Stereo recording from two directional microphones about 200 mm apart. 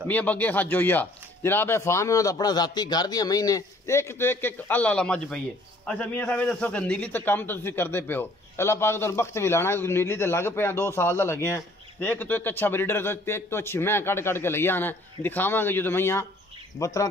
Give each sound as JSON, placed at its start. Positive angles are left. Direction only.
{"t": 0.1, "sound": "a man's voice", "side_deg": 10}